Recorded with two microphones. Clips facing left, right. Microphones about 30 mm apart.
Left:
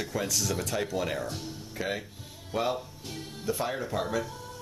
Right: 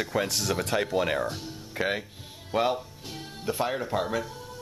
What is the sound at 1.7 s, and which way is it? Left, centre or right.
Speech, right.